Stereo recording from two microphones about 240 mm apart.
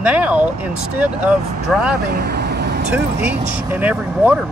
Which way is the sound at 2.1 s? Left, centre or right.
Right.